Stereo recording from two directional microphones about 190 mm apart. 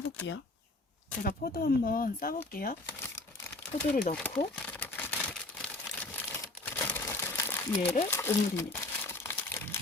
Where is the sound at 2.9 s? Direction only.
15° left (ahead or behind).